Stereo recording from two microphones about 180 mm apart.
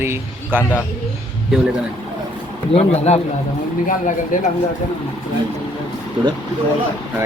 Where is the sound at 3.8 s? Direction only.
45° left (ahead or behind).